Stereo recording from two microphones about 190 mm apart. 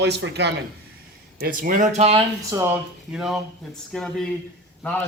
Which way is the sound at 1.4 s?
45° right (ahead or behind).